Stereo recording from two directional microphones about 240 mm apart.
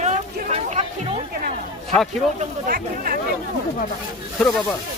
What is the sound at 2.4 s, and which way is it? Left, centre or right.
Speech, right.